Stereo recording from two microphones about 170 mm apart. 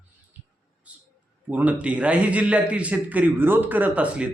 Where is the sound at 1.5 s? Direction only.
10° right (ahead or behind).